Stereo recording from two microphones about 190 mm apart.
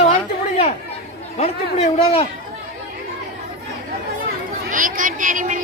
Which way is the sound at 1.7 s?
30° left (ahead or behind).